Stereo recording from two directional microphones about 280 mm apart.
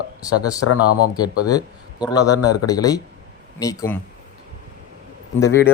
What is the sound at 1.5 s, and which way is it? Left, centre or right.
Speech, centre.